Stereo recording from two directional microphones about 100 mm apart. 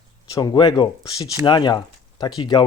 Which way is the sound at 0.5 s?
50° left (ahead or behind).